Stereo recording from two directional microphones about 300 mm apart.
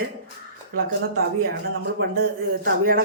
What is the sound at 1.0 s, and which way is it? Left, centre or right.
Speech, right.